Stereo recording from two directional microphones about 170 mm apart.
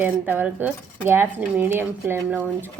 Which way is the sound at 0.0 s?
10° right (ahead or behind).